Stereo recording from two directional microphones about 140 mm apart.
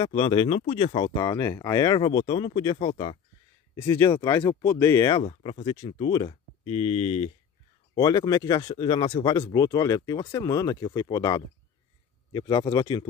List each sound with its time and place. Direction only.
0.0 s speech: 35° left (ahead or behind)
2.9 s speech: 45° left (ahead or behind)
3.7 s speech: 20° left (ahead or behind)
4.0 s speech: 30° left (ahead or behind)
4.6 s speech: 15° left (ahead or behind)
5.2 s speech: 45° left (ahead or behind)
7.9 s speech: 30° left (ahead or behind)